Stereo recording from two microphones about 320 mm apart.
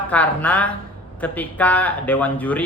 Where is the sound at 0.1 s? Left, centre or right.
Centre.